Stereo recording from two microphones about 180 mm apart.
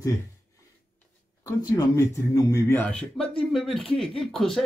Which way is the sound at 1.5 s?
15° left (ahead or behind).